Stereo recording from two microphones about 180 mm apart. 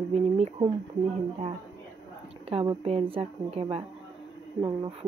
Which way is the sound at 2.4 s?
35° right (ahead or behind).